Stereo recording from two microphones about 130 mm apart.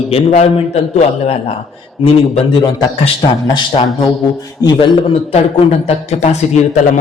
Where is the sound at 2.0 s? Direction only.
40° left (ahead or behind).